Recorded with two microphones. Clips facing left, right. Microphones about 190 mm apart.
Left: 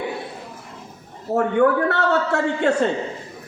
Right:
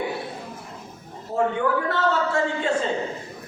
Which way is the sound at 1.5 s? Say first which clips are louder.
Left 6 dB; 65° left (ahead or behind).